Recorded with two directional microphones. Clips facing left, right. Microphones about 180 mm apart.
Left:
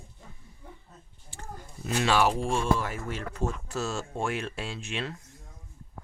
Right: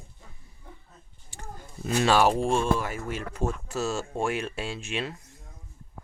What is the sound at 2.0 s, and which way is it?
Speech, 40° right (ahead or behind).